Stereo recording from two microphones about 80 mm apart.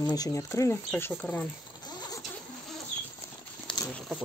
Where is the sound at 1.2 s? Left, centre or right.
Centre.